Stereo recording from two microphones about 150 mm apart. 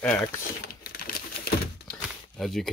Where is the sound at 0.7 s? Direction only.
80° left.